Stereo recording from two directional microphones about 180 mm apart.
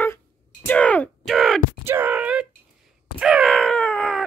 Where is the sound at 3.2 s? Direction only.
Centre (ahead or behind).